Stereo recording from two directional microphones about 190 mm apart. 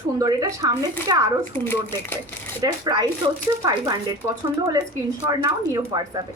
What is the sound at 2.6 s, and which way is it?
A woman's voice, 20° right (ahead or behind).